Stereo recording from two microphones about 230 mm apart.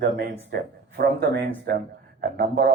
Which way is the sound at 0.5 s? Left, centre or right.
Right.